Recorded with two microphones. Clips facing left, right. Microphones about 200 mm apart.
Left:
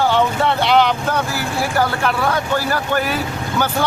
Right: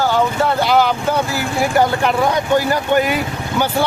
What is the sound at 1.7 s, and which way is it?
A man's voice, 20° right (ahead or behind).